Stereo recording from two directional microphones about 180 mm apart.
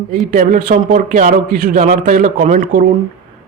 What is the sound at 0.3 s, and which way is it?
A man's voice, 50° right (ahead or behind).